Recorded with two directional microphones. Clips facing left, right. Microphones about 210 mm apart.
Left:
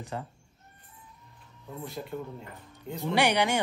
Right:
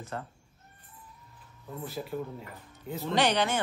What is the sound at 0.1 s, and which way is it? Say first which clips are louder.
Speech: left 1 dB; 15° left (ahead or behind).